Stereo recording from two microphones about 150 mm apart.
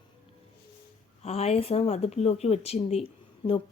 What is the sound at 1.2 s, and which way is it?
Speech, 45° left (ahead or behind).